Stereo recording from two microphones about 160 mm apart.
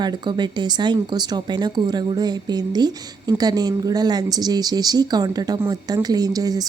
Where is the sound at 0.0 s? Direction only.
25° right (ahead or behind).